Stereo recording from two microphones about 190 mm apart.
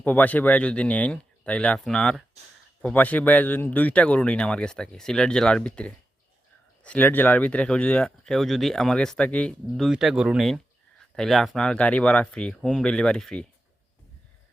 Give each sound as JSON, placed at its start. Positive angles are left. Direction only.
{"t": 0.0, "sound": "speech", "side_deg": 10}